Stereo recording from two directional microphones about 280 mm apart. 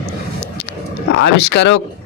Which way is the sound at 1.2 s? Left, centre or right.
Left.